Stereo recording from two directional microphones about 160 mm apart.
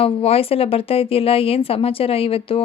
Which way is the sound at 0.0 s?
35° left (ahead or behind).